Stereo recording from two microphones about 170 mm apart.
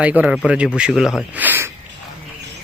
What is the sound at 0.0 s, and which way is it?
Speech, 10° right (ahead or behind).